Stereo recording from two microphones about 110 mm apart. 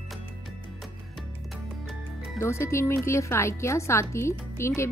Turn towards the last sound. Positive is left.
turn(degrees=25)  # may be behind; listen again after turning